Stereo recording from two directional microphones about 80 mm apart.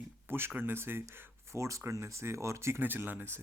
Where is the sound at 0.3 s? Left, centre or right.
Right.